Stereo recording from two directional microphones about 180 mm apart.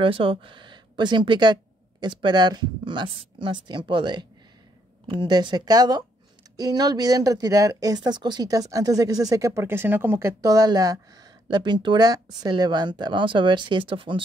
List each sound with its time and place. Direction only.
0.0 s speech: 30° right (ahead or behind)